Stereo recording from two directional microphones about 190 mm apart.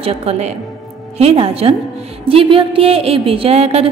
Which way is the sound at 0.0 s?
30° right (ahead or behind).